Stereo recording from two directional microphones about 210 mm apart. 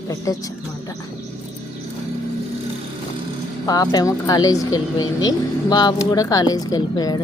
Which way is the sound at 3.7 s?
15° left (ahead or behind).